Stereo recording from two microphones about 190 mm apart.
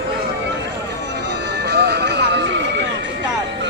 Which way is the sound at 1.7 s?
60° right (ahead or behind).